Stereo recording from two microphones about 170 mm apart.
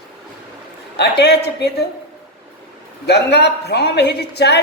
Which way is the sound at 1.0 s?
75° left (ahead or behind).